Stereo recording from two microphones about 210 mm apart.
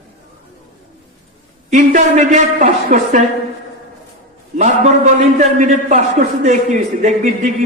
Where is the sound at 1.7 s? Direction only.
35° right (ahead or behind).